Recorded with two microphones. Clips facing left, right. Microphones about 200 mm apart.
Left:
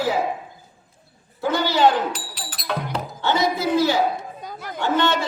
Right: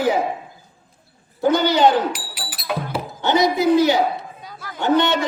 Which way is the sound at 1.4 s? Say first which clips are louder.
Right 3 dB; 20° right (ahead or behind).